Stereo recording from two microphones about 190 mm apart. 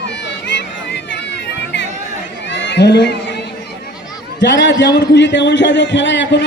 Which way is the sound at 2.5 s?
65° left (ahead or behind).